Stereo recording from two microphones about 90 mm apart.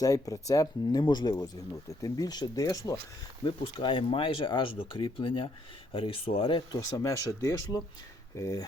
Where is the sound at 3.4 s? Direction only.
80° left.